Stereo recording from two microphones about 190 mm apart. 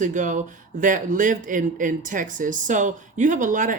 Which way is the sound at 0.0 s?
40° right (ahead or behind).